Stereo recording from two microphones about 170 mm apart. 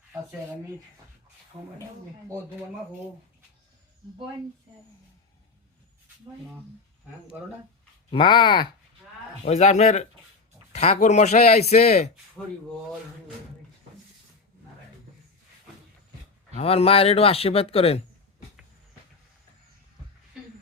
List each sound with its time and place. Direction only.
8.1 s speech: 30° left (ahead or behind)
9.4 s speech: 40° left (ahead or behind)
16.6 s speech: 35° left (ahead or behind)